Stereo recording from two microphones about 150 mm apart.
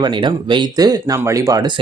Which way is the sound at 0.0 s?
30° right (ahead or behind).